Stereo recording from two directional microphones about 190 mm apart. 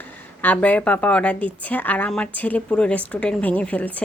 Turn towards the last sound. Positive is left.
turn(degrees=10)  # may be behind; listen again after turning